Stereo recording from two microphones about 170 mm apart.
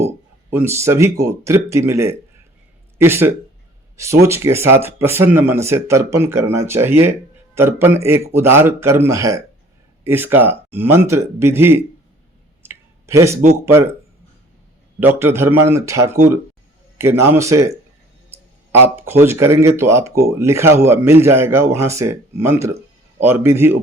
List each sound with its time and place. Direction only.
0.5 s speech: 15° right (ahead or behind)
12.6 s a sound: 15° right (ahead or behind)
15.0 s speech: 10° right (ahead or behind)